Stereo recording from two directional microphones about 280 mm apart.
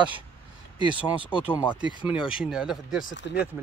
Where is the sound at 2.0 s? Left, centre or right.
Centre.